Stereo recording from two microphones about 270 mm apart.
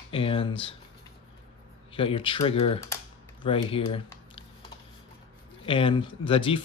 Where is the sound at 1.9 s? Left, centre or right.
Centre.